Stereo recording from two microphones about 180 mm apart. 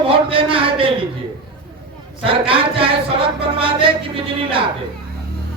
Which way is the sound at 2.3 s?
30° right (ahead or behind).